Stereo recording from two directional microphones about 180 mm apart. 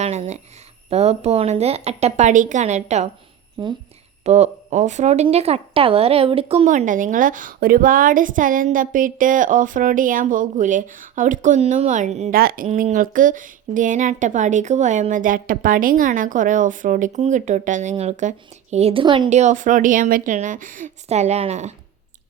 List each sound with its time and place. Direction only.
0.0 s a sound: 35° right (ahead or behind)
0.9 s a woman's voice: 35° right (ahead or behind)
3.6 s speech: 25° right (ahead or behind)
4.2 s a woman's voice: 35° right (ahead or behind)
6.7 s a woman's voice: 45° right (ahead or behind)
12.3 s a woman's voice: 55° right (ahead or behind); by 19.3 s 25° right (ahead or behind)
19.3 s a woman's voice: 40° right (ahead or behind)